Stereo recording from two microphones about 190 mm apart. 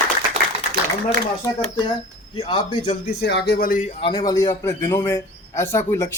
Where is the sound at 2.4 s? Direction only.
25° left (ahead or behind).